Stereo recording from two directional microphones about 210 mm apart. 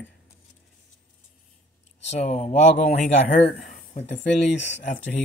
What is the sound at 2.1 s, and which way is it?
Speech, 30° left (ahead or behind).